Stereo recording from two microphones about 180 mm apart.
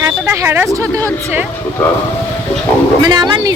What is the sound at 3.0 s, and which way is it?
Speech, 25° right (ahead or behind).